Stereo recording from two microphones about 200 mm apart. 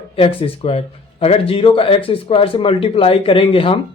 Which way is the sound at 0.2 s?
30° left (ahead or behind).